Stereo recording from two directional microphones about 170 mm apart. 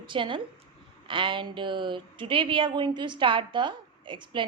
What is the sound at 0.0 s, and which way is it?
A woman's voice, 30° right (ahead or behind).